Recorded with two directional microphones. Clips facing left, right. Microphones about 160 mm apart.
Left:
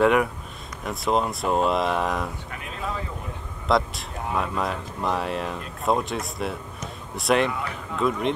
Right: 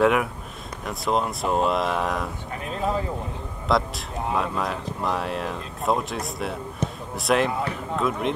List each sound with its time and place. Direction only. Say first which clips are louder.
0.0 s speech: left 1 dB; centre (ahead or behind)
2.5 s speech: right 6 dB; 35° right (ahead or behind)
3.6 s speech: left 1 dB; centre (ahead or behind)
6.8 s a sound: right 11 dB; 30° right (ahead or behind)
7.2 s speech: even; centre (ahead or behind)